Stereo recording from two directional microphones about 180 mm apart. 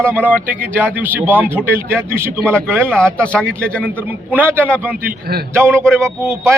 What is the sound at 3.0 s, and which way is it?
Speech, 5° left (ahead or behind).